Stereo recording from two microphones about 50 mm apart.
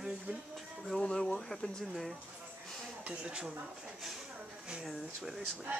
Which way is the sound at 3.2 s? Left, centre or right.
Centre.